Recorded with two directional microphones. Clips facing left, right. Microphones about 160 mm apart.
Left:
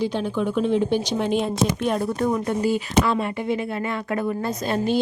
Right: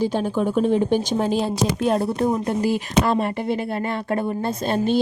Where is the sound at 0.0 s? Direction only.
45° right (ahead or behind).